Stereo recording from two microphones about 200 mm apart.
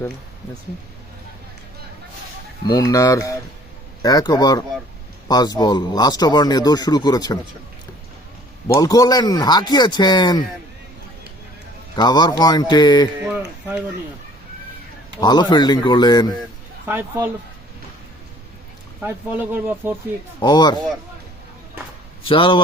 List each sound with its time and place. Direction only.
2.6 s speech: 15° left (ahead or behind)
8.6 s speech: 15° left (ahead or behind)
11.9 s speech: 20° left (ahead or behind)
15.2 s speech: 20° left (ahead or behind)
16.8 s speech: 10° right (ahead or behind)
19.0 s speech: 10° right (ahead or behind)
20.4 s speech: 20° left (ahead or behind)
22.2 s speech: 25° left (ahead or behind)